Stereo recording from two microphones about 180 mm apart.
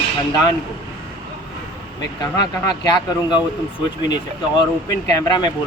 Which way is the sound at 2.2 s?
25° left (ahead or behind).